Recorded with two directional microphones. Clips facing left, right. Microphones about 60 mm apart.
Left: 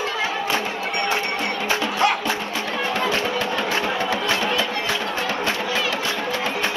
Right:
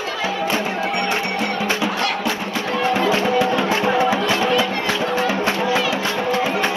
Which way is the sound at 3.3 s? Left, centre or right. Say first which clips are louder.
Right 5 dB; centre.